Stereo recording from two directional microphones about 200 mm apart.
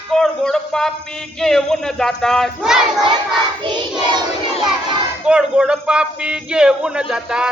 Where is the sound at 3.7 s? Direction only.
20° right (ahead or behind).